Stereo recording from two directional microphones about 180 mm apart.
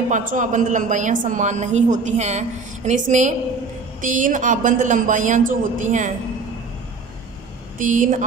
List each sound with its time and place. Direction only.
0.1 s a woman's voice: 45° right (ahead or behind)
7.8 s a woman's voice: 45° right (ahead or behind)